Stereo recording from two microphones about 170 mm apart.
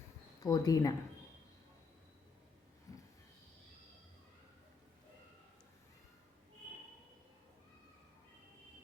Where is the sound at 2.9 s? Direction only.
20° left (ahead or behind).